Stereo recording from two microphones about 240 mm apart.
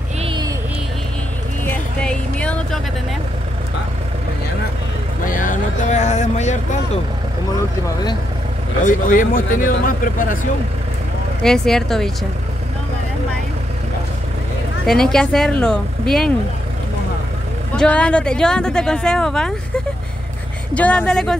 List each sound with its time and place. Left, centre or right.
0.2 s vehicle: right
1.7 s music: centre
5.2 s speech: left
8.8 s speech: left
11.4 s speech: centre
14.9 s speech: centre
17.7 s speech: centre
20.7 s speech: centre